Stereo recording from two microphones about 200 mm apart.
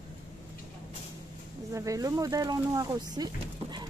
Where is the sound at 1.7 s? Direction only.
15° right (ahead or behind).